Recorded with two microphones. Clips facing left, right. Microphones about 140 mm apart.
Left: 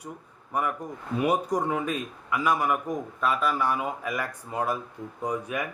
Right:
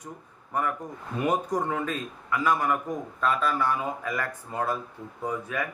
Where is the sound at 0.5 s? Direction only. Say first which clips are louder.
Even; 10° left (ahead or behind).